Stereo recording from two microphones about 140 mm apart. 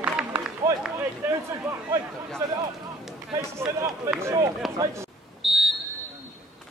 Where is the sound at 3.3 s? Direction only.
20° right (ahead or behind).